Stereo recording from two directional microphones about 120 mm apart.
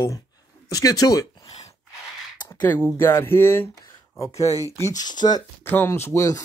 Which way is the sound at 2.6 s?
15° left (ahead or behind).